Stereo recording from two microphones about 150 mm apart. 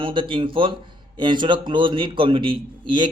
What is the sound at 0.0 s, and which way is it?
A man's voice, 35° right (ahead or behind).